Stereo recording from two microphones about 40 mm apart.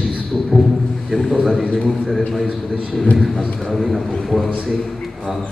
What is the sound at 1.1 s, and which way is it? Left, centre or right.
A man's voice, centre.